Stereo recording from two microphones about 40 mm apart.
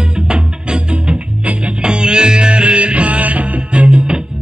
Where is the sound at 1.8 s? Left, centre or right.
Right.